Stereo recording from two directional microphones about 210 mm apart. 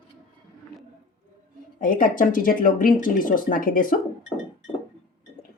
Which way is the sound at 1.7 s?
40° left (ahead or behind).